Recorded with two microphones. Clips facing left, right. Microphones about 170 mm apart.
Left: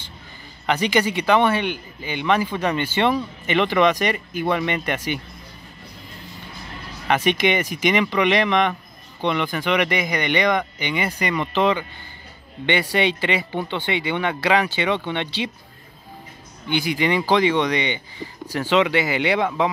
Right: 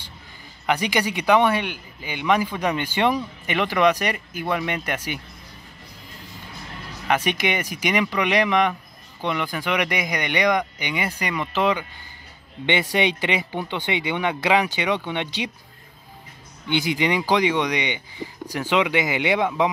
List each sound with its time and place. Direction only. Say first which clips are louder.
0.7 s speech: left 2 dB; 10° right (ahead or behind)
7.1 s speech: left 3 dB; 5° right (ahead or behind)
12.6 s speech: left 1 dB; 20° right (ahead or behind)
16.6 s speech: left 1 dB; 20° right (ahead or behind)